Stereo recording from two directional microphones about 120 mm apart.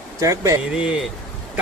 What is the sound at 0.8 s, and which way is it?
Speech, 5° right (ahead or behind).